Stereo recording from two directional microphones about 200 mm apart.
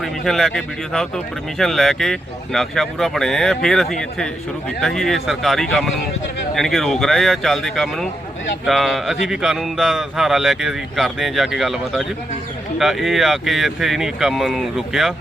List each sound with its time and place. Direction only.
0.0 s speech: centre (ahead or behind)